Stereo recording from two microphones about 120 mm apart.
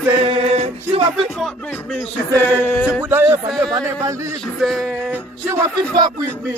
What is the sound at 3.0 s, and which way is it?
Female singing, 20° right (ahead or behind).